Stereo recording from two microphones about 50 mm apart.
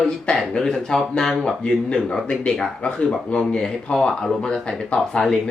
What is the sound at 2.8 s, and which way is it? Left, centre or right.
Speech, left.